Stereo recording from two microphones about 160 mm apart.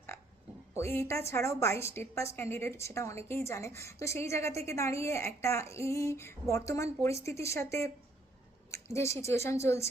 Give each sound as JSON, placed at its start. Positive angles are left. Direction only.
{"t": 0.1, "sound": "oink", "side_deg": 15}
{"t": 0.8, "sound": "a woman's voice", "side_deg": 15}